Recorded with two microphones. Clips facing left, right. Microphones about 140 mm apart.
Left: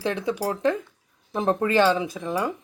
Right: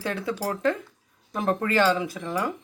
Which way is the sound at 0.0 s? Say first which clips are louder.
Left 3 dB; 20° left (ahead or behind).